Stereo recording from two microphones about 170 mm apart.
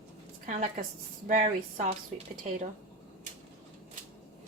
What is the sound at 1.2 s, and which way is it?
Speech, 50° right (ahead or behind).